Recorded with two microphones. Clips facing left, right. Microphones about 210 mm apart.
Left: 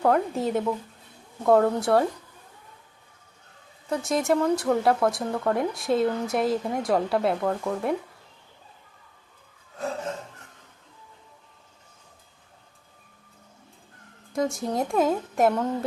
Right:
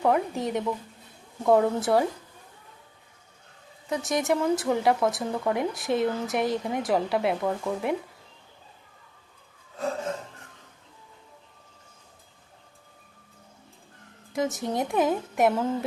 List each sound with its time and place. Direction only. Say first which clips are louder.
0.0 s speech: left 2 dB; centre (ahead or behind)
3.8 s speech: left 2 dB; centre (ahead or behind)
14.3 s speech: left 1 dB; centre (ahead or behind)